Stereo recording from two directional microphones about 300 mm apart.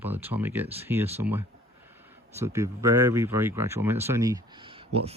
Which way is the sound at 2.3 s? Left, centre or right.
Centre.